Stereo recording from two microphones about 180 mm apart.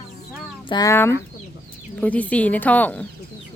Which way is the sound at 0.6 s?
25° left (ahead or behind).